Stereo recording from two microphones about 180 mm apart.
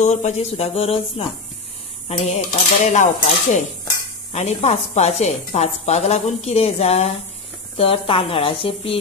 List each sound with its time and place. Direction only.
0.0 s speech: 40° left (ahead or behind)